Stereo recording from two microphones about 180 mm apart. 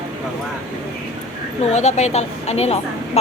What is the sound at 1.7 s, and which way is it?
A woman's voice, 40° left (ahead or behind).